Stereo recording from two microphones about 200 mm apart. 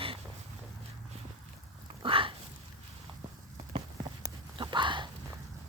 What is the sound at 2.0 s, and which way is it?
Dog, 25° right (ahead or behind).